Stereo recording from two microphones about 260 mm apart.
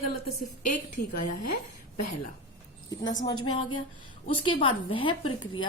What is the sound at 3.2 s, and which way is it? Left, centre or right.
A woman's voice, left.